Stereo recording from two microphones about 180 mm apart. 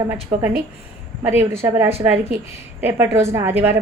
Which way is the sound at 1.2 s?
10° right (ahead or behind).